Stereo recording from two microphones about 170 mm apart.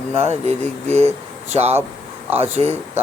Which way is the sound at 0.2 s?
40° right (ahead or behind).